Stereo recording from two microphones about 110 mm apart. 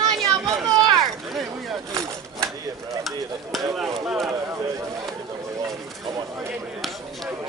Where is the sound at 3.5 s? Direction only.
Centre (ahead or behind).